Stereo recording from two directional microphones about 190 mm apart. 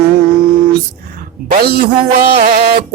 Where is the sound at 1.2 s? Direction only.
50° right (ahead or behind).